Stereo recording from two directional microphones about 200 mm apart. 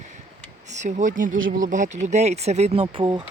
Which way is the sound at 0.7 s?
35° right (ahead or behind).